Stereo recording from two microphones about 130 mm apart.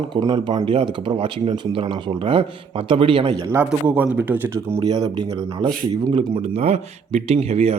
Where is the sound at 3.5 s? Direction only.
15° right (ahead or behind).